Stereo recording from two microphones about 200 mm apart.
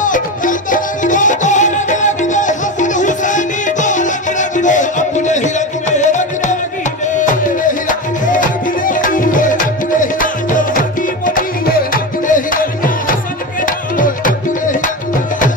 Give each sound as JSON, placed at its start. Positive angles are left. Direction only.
{"t": 0.0, "sound": "music", "side_deg": 40}